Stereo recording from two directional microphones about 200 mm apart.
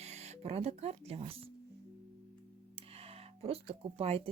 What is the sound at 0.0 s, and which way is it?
Speech, 35° right (ahead or behind).